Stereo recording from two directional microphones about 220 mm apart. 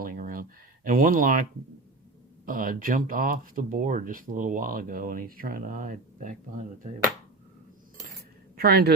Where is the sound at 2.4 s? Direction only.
40° right (ahead or behind).